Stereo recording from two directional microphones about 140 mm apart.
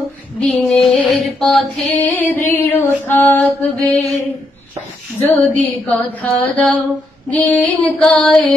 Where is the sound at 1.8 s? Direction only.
15° left (ahead or behind).